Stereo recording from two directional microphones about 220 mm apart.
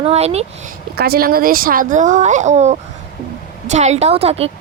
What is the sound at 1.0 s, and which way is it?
A woman's voice, 45° right (ahead or behind).